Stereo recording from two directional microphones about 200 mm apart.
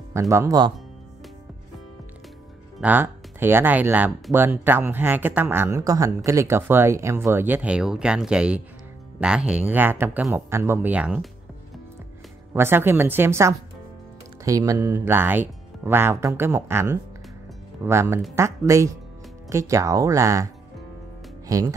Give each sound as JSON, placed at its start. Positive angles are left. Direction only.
{"t": 0.1, "sound": "speech", "side_deg": -15}
{"t": 2.8, "sound": "speech", "side_deg": -10}
{"t": 12.5, "sound": "speech", "side_deg": -10}
{"t": 21.5, "sound": "speech", "side_deg": -15}